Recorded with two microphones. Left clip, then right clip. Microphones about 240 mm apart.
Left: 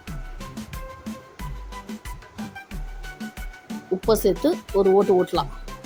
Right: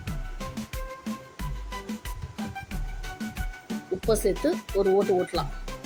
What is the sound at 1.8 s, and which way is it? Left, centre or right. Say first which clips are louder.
Music: even; centre.